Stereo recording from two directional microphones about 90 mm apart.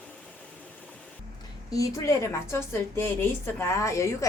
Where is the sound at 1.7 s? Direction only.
40° left (ahead or behind).